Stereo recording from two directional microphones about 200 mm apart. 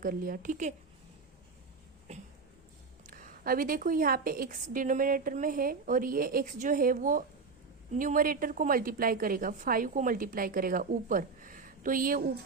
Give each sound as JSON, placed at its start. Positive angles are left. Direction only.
{"t": 0.0, "sound": "a woman's voice", "side_deg": -45}
{"t": 3.0, "sound": "a woman's voice", "side_deg": -45}